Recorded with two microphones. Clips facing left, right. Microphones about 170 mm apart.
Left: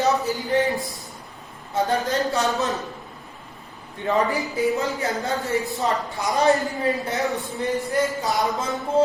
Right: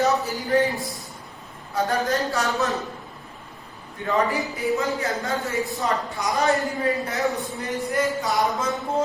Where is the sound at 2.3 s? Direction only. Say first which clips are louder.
Left 1 dB; 20° left (ahead or behind).